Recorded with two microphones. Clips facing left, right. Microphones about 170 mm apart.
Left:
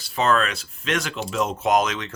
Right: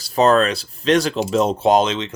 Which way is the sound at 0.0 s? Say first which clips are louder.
Right 7 dB; 40° right (ahead or behind).